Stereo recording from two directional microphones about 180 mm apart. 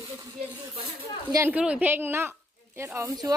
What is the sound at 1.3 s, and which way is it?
A woman's voice, 10° right (ahead or behind).